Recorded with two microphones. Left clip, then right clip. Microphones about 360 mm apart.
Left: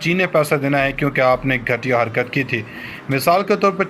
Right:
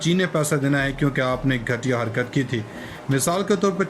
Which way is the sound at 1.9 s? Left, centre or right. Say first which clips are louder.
Left 7 dB; left.